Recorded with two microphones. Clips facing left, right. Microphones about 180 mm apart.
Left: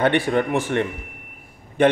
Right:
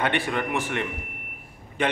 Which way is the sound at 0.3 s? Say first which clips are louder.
Left 6 dB; 45° left (ahead or behind).